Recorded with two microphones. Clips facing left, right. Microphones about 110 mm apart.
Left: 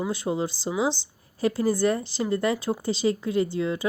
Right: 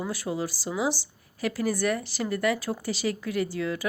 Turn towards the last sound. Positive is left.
turn(degrees=25)  # may be behind; listen again after turning